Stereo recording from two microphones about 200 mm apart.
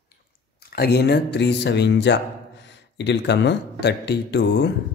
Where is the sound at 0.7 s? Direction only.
55° left (ahead or behind).